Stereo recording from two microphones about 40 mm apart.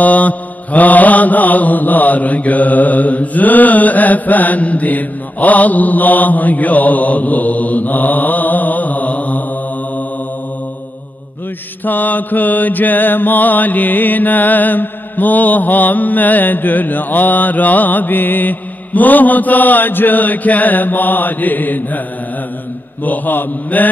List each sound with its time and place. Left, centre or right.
0.0 s mantra: left
11.8 s mantra: left
23.0 s mantra: left